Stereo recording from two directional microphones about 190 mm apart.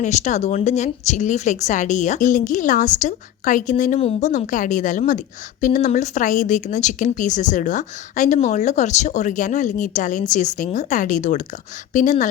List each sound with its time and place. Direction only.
0.0 s a woman's voice: 40° left (ahead or behind)